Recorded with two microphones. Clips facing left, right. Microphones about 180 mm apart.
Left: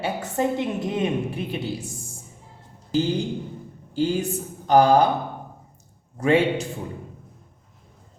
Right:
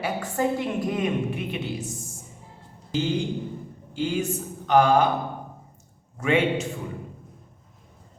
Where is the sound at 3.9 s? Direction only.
35° left (ahead or behind).